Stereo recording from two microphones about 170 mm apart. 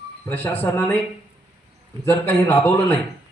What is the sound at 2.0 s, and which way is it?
Speech, 10° left (ahead or behind).